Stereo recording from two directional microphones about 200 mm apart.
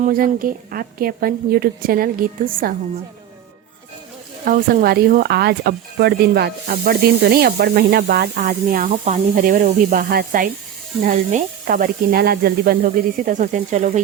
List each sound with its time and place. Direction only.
0.0 s speech: 45° right (ahead or behind)
4.4 s speech: 45° right (ahead or behind)